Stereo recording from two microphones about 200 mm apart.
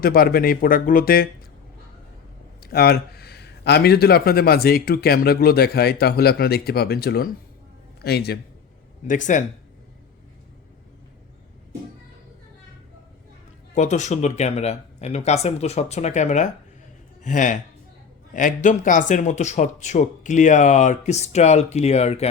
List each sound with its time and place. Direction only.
0.0 s speech: 45° left (ahead or behind)
2.6 s speech: 50° left (ahead or behind)
9.0 s speech: 40° left (ahead or behind)
13.7 s speech: 35° left (ahead or behind)